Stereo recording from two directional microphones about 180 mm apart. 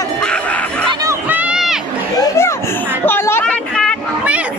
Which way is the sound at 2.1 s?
20° left (ahead or behind).